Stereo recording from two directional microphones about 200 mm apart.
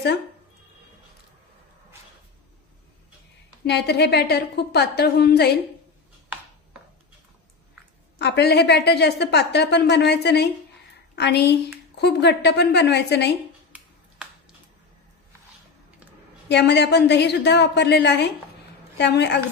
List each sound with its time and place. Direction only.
3.6 s a woman's voice: 55° left (ahead or behind)
8.2 s a woman's voice: 55° left (ahead or behind)
13.7 s finger snapping: 5° right (ahead or behind)
16.4 s a woman's voice: 60° left (ahead or behind)